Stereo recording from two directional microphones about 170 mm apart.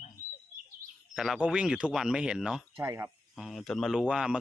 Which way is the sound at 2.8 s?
15° right (ahead or behind).